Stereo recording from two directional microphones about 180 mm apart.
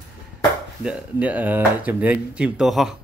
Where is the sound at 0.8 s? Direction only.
10° right (ahead or behind).